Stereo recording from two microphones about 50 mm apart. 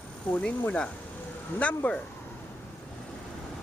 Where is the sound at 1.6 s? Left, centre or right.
Left.